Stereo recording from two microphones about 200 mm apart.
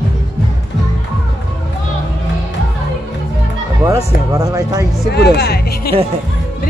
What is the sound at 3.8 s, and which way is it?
Speech, 15° right (ahead or behind).